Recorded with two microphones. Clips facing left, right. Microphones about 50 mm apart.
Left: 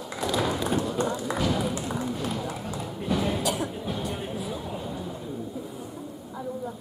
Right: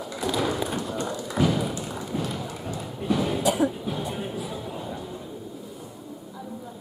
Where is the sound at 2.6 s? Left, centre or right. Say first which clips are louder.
Even; centre.